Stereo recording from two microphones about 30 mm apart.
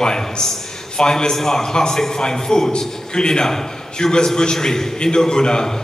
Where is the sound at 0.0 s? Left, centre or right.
Left.